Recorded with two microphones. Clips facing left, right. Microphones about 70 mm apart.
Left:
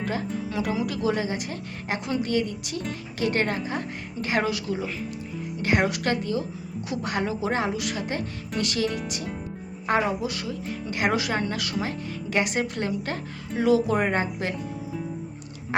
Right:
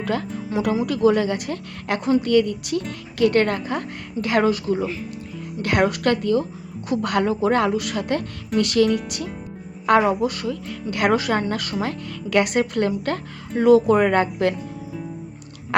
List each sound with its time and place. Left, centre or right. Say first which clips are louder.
0.0 s speech: right 3 dB; right
5.6 s speech: right 4 dB; right